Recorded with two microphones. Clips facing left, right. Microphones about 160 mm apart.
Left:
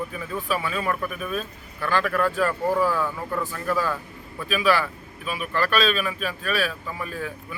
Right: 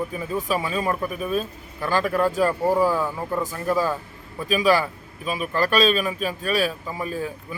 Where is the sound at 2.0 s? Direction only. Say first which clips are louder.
Right 4 dB; 20° right (ahead or behind).